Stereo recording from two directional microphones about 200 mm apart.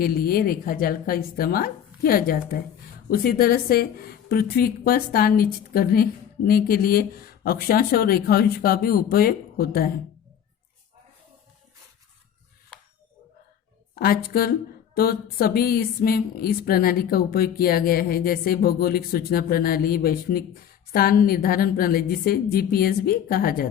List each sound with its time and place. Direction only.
0.0 s a woman's voice: 50° left (ahead or behind)
13.9 s a woman's voice: 50° left (ahead or behind)